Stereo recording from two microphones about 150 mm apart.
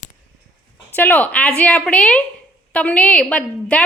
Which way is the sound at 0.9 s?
10° left (ahead or behind).